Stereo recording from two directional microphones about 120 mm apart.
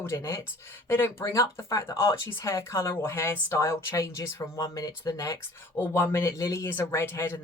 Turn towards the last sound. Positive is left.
turn(degrees=20)  # may be behind; listen again after turning